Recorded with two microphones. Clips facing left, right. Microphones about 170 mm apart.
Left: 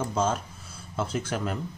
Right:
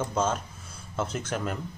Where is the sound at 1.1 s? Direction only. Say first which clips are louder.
Left 1 dB; 5° left (ahead or behind).